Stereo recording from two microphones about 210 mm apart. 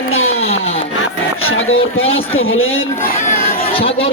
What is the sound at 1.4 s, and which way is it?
Music, 70° left (ahead or behind).